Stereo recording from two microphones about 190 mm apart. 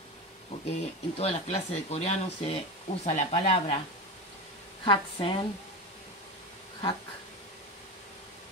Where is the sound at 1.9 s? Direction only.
35° left (ahead or behind).